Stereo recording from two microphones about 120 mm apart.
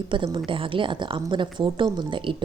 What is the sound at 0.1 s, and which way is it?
A woman's voice, 40° right (ahead or behind).